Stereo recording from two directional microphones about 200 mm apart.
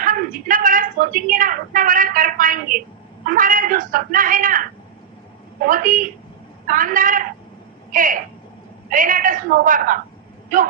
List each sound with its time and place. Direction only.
0.0 s a woman's voice: 40° right (ahead or behind)
5.6 s a woman's voice: 45° right (ahead or behind)